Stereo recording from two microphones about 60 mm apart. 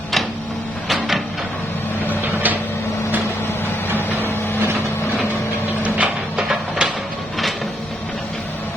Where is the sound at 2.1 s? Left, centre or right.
Right.